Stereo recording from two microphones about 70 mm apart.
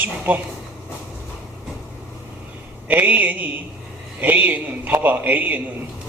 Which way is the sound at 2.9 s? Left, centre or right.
Right.